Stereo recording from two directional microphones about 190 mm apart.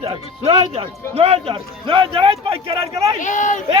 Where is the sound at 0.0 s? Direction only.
30° right (ahead or behind).